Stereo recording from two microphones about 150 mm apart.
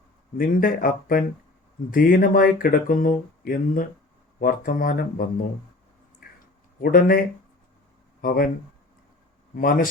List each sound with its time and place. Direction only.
0.3 s speech: 70° left (ahead or behind)
6.2 s a sound: 70° left (ahead or behind)
6.7 s speech: 70° left (ahead or behind)
8.2 s speech: 75° left (ahead or behind)
9.6 s speech: 70° left (ahead or behind)